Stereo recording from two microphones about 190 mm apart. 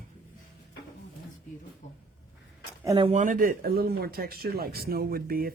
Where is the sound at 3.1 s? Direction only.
40° right (ahead or behind).